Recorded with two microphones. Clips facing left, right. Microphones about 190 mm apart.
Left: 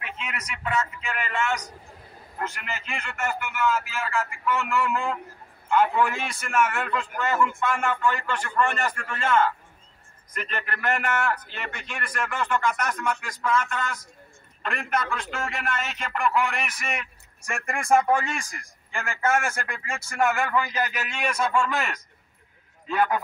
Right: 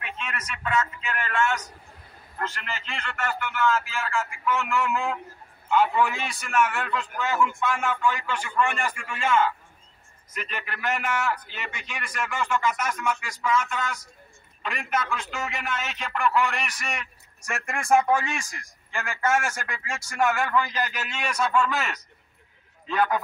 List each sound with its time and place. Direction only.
0.2 s a man's voice: 10° left (ahead or behind)
18.4 s a man's voice: 55° left (ahead or behind)
18.9 s a man's voice: centre (ahead or behind)